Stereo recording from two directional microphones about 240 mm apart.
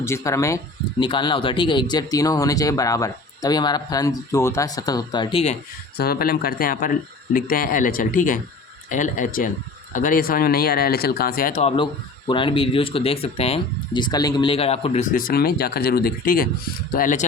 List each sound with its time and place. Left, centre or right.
0.0 s speech: centre
6.0 s speech: left